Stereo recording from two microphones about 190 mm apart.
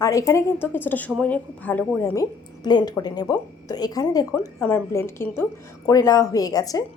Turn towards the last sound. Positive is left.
turn(degrees=20)  # may be behind; listen again after turning